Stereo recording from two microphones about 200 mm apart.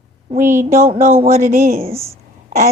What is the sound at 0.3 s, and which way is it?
A woman's voice, 40° right (ahead or behind).